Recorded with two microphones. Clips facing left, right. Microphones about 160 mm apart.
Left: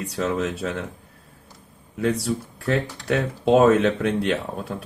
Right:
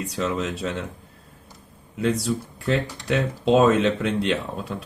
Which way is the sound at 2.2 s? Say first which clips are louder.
Even; 55° left (ahead or behind).